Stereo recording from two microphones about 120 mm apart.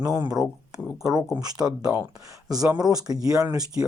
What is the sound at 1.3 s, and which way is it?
Speech, 30° right (ahead or behind).